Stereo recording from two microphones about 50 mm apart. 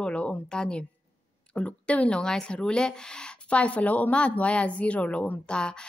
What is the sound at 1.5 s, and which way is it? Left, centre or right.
Speech, left.